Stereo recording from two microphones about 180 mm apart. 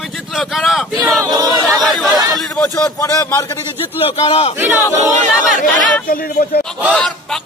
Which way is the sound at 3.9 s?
30° left (ahead or behind).